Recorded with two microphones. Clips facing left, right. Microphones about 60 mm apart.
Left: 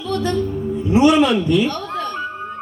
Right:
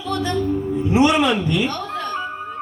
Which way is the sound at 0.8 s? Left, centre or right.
Right.